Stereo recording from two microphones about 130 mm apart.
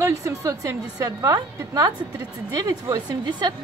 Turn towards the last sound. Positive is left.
turn(degrees=-30)  # may be behind; listen again after turning